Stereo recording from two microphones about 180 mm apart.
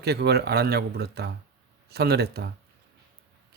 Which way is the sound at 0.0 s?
65° right (ahead or behind).